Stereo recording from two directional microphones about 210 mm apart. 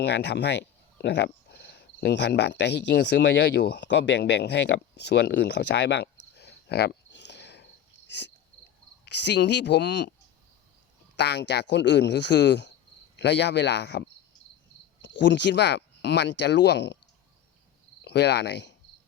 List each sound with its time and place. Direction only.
0.0 s speech: 55° left (ahead or behind)
11.2 s speech: 55° left (ahead or behind)
15.0 s speech: 55° left (ahead or behind)
18.0 s speech: 55° left (ahead or behind)